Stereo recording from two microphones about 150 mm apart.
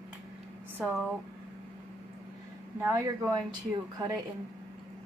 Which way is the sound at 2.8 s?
15° right (ahead or behind).